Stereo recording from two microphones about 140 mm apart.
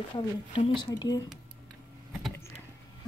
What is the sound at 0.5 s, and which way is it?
Speech, 35° left (ahead or behind).